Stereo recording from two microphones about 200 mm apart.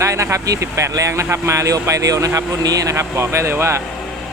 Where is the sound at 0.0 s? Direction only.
15° right (ahead or behind).